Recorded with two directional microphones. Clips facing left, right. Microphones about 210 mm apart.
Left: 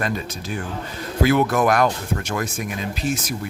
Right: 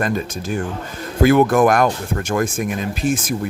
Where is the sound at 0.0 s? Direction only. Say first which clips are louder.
Right 4 dB; 50° right (ahead or behind).